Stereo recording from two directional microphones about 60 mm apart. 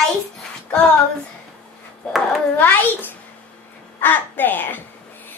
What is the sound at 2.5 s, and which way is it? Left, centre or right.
A woman's voice, left.